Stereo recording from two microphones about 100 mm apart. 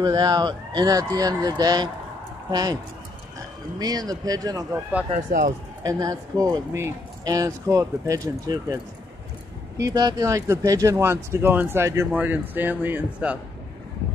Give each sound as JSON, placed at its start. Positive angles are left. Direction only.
{"t": 0.0, "sound": "speech", "side_deg": -40}
{"t": 3.8, "sound": "speech", "side_deg": -40}
{"t": 5.9, "sound": "speech", "side_deg": -35}
{"t": 9.8, "sound": "speech", "side_deg": -35}